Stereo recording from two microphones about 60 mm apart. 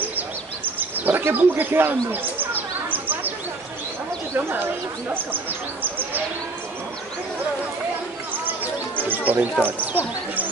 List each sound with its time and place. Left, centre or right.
0.7 s speech: right
2.0 s bird: right
5.1 s speech: right
8.3 s speech: right